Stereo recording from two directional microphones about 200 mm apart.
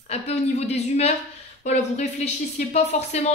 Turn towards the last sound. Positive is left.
turn(degrees=35)  # may be behind; listen again after turning